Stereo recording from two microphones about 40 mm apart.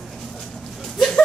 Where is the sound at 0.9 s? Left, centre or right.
Centre.